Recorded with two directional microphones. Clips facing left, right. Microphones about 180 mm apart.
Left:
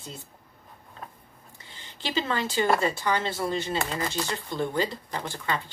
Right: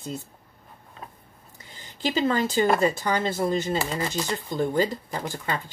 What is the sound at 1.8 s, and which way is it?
Speech, 40° right (ahead or behind).